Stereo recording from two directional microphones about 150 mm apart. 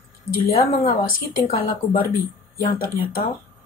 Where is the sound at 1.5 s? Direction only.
80° left.